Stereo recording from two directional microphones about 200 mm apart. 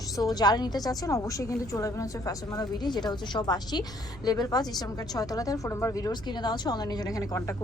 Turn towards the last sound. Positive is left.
turn(degrees=15)  # may be behind; listen again after turning